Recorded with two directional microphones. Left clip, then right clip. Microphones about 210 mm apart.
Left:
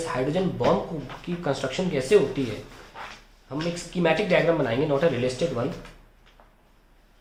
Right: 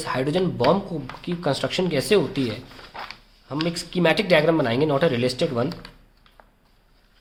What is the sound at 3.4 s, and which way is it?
Speech, 45° right (ahead or behind).